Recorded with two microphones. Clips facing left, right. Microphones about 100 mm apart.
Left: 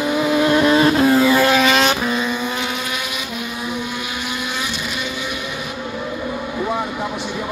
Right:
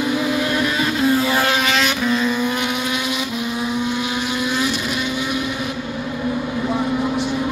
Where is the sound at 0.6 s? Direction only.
40° left (ahead or behind).